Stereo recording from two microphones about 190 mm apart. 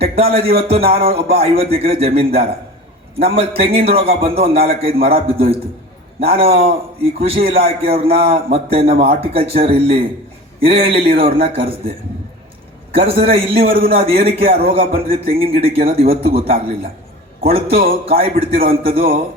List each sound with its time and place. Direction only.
0.0 s a man's voice: 30° right (ahead or behind)
13.7 s a man's voice: 50° right (ahead or behind)
13.9 s a man's voice: 30° right (ahead or behind)